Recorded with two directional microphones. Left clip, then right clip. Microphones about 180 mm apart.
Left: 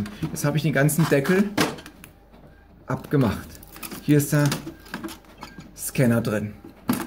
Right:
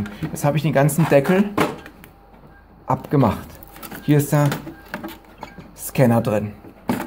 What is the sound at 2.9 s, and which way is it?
Speech, 25° right (ahead or behind).